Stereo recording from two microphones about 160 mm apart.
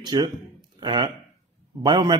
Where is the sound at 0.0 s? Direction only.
25° right (ahead or behind).